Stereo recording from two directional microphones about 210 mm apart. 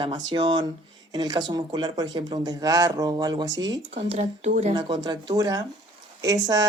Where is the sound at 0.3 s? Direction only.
20° right (ahead or behind).